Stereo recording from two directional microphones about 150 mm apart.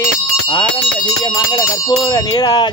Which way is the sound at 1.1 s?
25° left (ahead or behind).